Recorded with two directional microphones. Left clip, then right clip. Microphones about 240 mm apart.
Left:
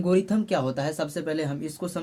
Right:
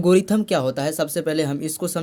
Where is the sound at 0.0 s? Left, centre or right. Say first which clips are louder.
Right 6 dB; right.